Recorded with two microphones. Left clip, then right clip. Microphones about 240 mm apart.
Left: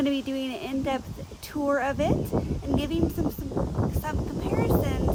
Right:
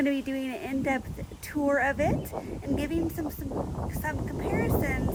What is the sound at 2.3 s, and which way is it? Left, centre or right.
Speech, left.